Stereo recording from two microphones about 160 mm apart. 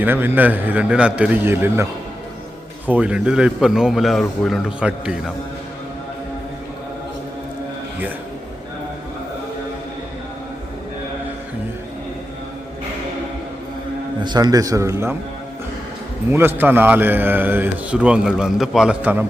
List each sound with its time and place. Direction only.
0.0 s a man's voice: 15° right (ahead or behind)
14.3 s a man's voice: 25° right (ahead or behind)
16.3 s a man's voice: 15° right (ahead or behind)